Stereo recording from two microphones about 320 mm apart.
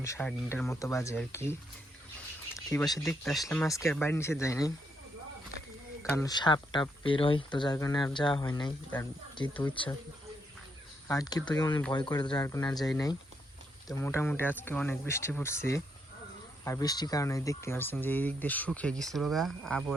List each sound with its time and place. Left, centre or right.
0.0 s speech: centre
2.6 s speech: centre
6.0 s speech: centre
11.1 s speech: centre